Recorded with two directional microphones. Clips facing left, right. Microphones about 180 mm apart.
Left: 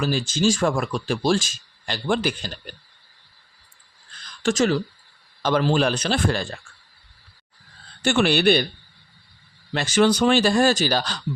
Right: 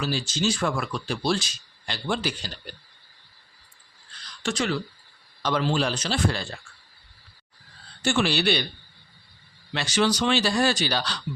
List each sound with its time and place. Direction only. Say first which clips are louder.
0.0 s speech: left 5 dB; 50° left (ahead or behind)
4.4 s speech: left 7 dB; 40° left (ahead or behind)
8.0 s a man's voice: left 5 dB; 55° left (ahead or behind)
9.7 s speech: left 5 dB; 50° left (ahead or behind)